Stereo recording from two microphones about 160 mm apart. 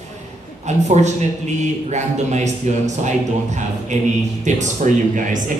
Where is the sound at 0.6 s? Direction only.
45° right (ahead or behind).